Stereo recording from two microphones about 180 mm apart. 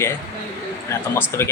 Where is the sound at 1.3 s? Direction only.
15° left (ahead or behind).